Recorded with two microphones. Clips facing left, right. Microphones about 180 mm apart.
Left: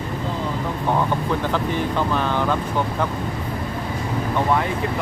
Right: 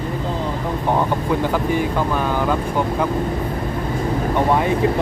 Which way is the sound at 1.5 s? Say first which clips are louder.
Right 3 dB; 10° right (ahead or behind).